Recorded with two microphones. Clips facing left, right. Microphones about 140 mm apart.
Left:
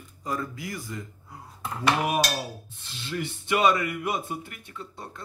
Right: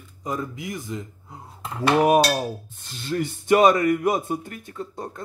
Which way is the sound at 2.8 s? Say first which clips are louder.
Right 6 dB; 45° right (ahead or behind).